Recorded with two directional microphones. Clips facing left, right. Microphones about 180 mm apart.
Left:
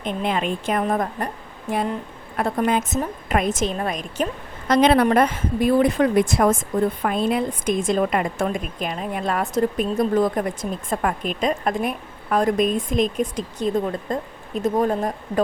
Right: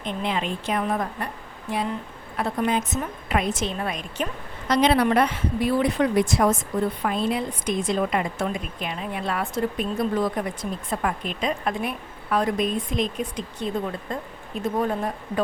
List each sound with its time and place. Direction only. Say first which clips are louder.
0.0 s a woman's voice: left 3 dB; 50° left (ahead or behind)
2.3 s a woman's voice: left 3 dB; 50° left (ahead or behind)